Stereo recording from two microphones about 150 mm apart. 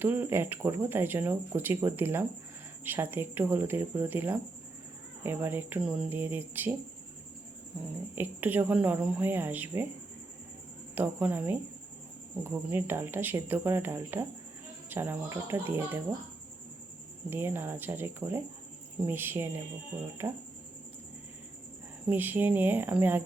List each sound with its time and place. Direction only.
0.0 s speech: 15° right (ahead or behind)
8.1 s speech: 10° right (ahead or behind)
10.9 s speech: 10° right (ahead or behind)
17.2 s speech: 15° right (ahead or behind)
22.1 s speech: 10° right (ahead or behind)